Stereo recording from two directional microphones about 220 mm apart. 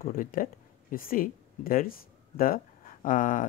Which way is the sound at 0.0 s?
40° left (ahead or behind).